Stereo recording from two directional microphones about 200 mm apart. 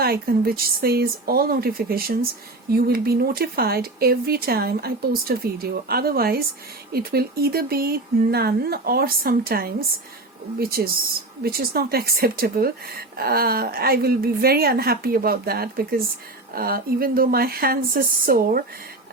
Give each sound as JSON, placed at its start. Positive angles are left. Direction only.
{"t": 0.0, "sound": "speech", "side_deg": -50}